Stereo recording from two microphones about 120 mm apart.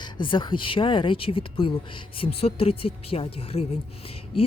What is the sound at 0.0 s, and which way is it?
A woman's voice, 40° left (ahead or behind).